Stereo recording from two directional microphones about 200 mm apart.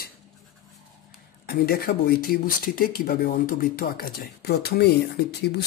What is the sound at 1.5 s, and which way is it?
Speech, 50° left (ahead or behind).